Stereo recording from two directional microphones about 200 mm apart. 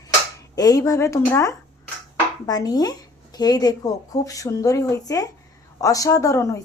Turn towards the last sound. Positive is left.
turn(degrees=15)  # may be behind; listen again after turning